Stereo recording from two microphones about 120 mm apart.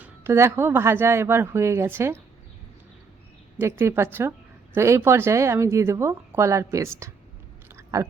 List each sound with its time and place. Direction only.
0.0 s a woman's voice: 20° right (ahead or behind)
3.6 s a woman's voice: 20° right (ahead or behind)
7.8 s chewing: 25° right (ahead or behind)